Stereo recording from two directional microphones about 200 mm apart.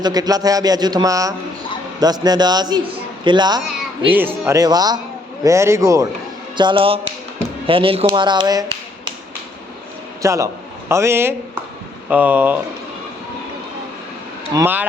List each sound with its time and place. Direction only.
0.0 s a man's voice: 20° right (ahead or behind)
10.2 s a man's voice: 15° right (ahead or behind)
14.5 s a man's voice: 10° right (ahead or behind)